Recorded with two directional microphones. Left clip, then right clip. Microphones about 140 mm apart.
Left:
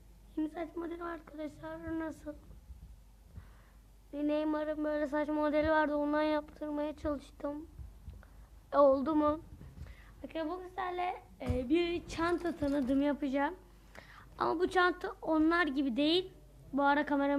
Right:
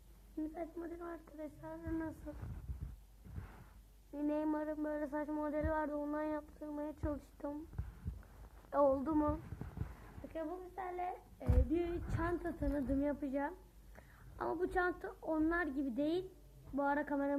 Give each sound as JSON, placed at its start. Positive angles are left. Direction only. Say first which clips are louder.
{"t": 0.3, "sound": "a woman's voice", "louder": "left 6 dB", "side_deg": 20}
{"t": 1.0, "sound": "speech", "louder": "left 6 dB", "side_deg": 10}
{"t": 4.1, "sound": "a man's voice", "louder": "left 5 dB", "side_deg": 0}
{"t": 7.0, "sound": "a sound", "louder": "left 6 dB", "side_deg": 5}
{"t": 8.7, "sound": "a sound", "louder": "left 6 dB", "side_deg": 0}
{"t": 10.2, "sound": "speech", "louder": "left 5 dB", "side_deg": 10}
{"t": 11.8, "sound": "a man's voice", "louder": "left 6 dB", "side_deg": 20}
{"t": 13.9, "sound": "a sound", "louder": "left 9 dB", "side_deg": 25}
{"t": 15.2, "sound": "a man's voice", "louder": "left 7 dB", "side_deg": 25}